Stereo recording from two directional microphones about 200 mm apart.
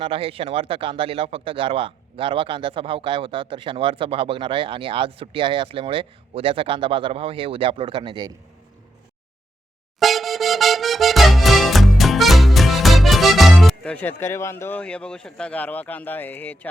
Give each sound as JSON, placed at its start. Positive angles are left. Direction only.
{"t": 0.0, "sound": "speech", "side_deg": -30}
{"t": 10.0, "sound": "accordion", "side_deg": 0}